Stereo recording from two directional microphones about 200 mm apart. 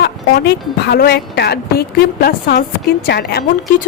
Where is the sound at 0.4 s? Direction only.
55° left (ahead or behind).